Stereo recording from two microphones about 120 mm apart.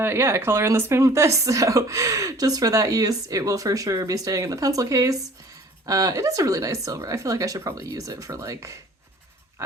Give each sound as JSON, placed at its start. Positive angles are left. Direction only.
{"t": 0.0, "sound": "speech", "side_deg": -20}